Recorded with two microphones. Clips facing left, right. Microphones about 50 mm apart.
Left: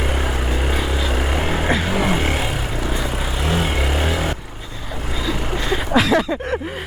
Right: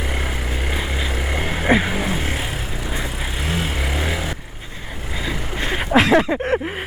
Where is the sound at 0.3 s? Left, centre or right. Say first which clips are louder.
Left 4 dB; left.